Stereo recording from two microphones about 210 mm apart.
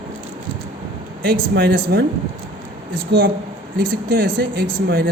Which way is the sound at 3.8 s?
45° right (ahead or behind).